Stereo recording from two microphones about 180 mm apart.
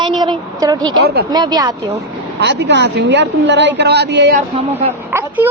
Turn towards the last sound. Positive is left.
turn(degrees=-10)  # may be behind; listen again after turning